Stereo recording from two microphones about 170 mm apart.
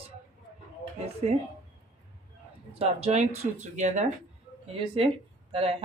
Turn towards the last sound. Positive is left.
turn(degrees=-35)  # may be behind; listen again after turning